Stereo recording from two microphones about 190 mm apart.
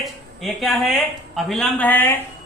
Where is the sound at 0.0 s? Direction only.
Centre (ahead or behind).